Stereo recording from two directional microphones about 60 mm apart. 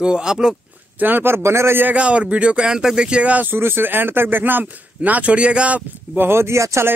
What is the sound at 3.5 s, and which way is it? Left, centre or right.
Speech, right.